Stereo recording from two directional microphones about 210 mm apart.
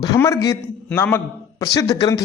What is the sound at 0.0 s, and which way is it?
A man's voice, 15° left (ahead or behind).